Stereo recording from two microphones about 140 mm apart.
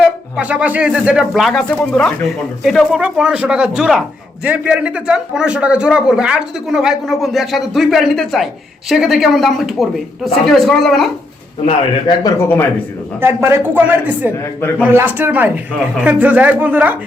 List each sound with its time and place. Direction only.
0.0 s speech: 5° right (ahead or behind)
12.0 s speech: 25° left (ahead or behind)
13.2 s speech: 15° right (ahead or behind)